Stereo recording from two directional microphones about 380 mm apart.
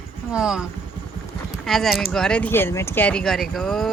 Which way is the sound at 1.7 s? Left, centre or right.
Centre.